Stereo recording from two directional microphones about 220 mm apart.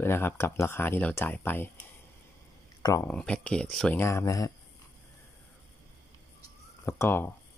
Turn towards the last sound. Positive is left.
turn(degrees=10)  # may be behind; listen again after turning